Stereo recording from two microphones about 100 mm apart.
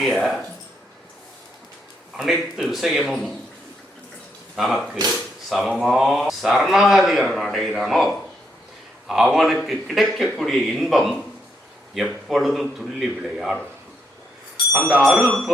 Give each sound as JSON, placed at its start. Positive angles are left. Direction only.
{"t": 0.0, "sound": "speech", "side_deg": 0}
{"t": 2.1, "sound": "speech", "side_deg": 0}
{"t": 4.5, "sound": "speech", "side_deg": 0}
{"t": 14.8, "sound": "speech", "side_deg": -5}